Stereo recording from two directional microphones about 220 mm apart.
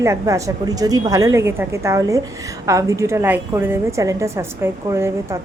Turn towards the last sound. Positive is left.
turn(degrees=-10)  # may be behind; listen again after turning